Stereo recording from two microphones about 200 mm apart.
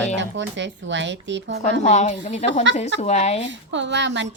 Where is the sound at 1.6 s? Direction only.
35° left (ahead or behind).